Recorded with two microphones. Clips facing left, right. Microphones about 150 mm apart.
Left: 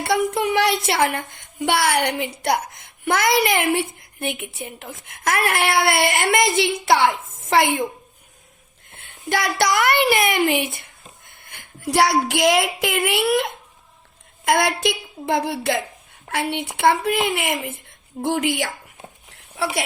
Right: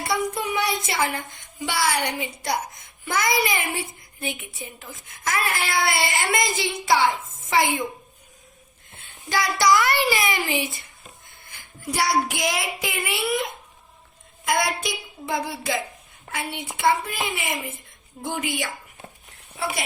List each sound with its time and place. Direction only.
0.3 s a woman's voice: 70° left (ahead or behind)
7.1 s a child's voice: 20° left (ahead or behind)
7.5 s speech: 60° left (ahead or behind)
9.3 s speech: 60° left (ahead or behind)
11.3 s a sound: 60° left (ahead or behind)
12.3 s speech: 60° left (ahead or behind)
14.4 s a woman's voice: 75° left (ahead or behind)
15.3 s a woman's voice: 60° left (ahead or behind); by 19.8 s 75° left (ahead or behind)